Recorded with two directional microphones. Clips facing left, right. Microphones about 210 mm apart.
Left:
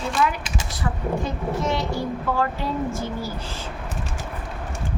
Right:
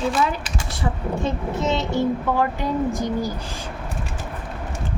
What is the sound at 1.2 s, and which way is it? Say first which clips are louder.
A child's voice: right 2 dB; 20° right (ahead or behind).